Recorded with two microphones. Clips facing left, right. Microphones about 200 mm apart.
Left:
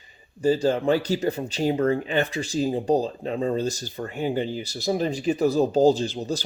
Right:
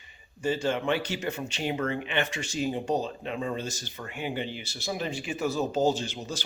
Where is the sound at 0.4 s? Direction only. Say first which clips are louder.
Left 7 dB; 35° left (ahead or behind).